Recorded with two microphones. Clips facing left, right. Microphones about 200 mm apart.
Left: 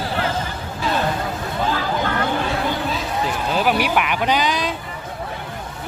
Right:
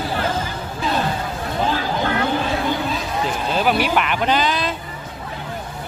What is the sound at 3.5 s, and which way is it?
Speech, 10° left (ahead or behind).